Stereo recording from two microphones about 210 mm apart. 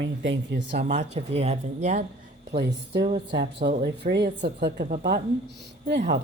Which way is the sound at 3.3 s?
50° right (ahead or behind).